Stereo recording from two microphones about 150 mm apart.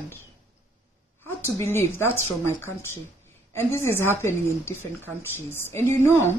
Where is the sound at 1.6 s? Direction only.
15° left (ahead or behind).